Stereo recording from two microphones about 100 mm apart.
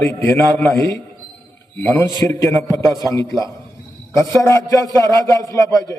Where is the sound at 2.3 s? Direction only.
30° left (ahead or behind).